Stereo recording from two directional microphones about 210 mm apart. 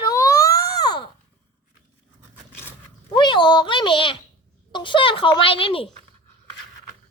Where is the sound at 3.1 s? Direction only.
20° left (ahead or behind).